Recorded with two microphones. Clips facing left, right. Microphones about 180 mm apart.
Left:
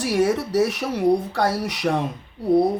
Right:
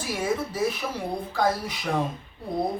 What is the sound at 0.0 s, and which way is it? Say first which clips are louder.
Speech: left 7 dB; 75° left (ahead or behind).